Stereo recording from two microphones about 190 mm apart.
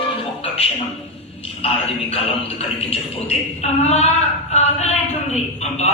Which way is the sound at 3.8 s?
35° left (ahead or behind).